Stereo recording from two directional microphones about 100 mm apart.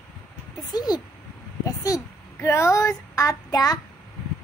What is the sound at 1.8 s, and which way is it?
Child singing, 35° left (ahead or behind).